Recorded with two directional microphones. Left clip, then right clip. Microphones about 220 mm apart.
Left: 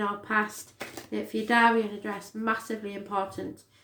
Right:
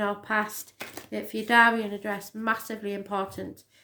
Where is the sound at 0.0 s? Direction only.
40° right (ahead or behind).